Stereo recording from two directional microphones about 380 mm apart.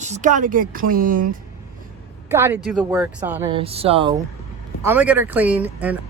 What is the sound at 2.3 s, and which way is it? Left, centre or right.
Speech, centre.